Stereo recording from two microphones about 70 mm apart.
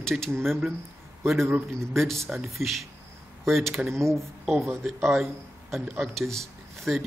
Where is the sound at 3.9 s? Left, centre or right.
Right.